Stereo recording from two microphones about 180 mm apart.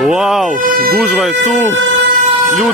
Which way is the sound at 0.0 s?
Centre (ahead or behind).